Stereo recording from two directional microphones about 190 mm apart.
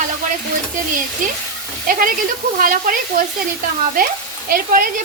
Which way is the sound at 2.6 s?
45° right (ahead or behind).